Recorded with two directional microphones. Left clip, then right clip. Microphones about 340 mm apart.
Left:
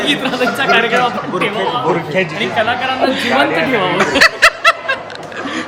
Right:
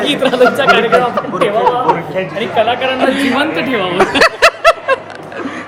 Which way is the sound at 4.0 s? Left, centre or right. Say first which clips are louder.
Right 1 dB; centre.